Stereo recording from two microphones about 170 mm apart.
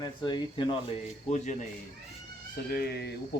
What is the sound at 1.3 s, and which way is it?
Speech, 40° left (ahead or behind).